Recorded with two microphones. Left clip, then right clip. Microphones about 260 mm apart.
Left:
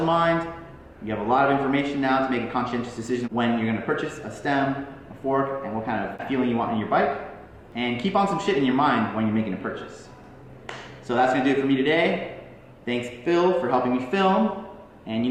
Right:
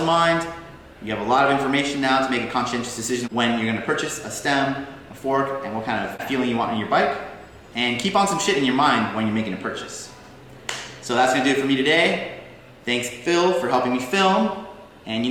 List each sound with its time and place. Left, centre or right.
0.0 s speech: centre
11.0 s speech: centre